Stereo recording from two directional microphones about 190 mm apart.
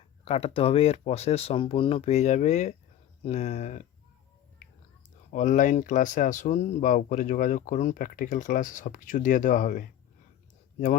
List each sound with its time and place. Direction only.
0.3 s speech: 30° left (ahead or behind)
4.6 s whispering: 40° left (ahead or behind)
5.3 s speech: 45° left (ahead or behind)